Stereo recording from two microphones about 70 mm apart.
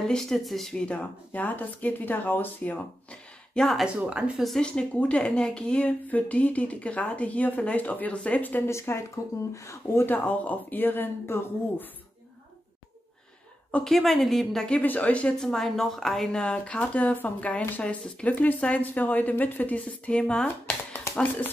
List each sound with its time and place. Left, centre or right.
0.0 s speech: centre
0.8 s speech: left
3.6 s speech: centre
8.6 s speech: left
10.0 s speech: left
13.8 s speech: centre
14.7 s speech: left
15.3 s speech: centre